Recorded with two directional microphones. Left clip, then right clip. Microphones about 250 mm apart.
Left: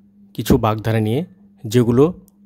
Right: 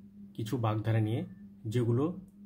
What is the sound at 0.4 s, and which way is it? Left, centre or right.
Speech, left.